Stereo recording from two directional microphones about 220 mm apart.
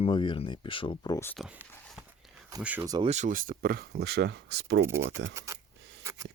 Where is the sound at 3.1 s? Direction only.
35° right (ahead or behind); by 4.8 s 50° right (ahead or behind).